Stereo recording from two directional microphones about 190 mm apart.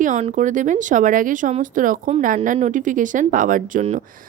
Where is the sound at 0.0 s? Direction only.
40° right (ahead or behind).